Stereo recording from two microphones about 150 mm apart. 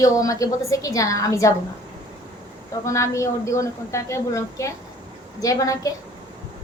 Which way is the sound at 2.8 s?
20° left (ahead or behind).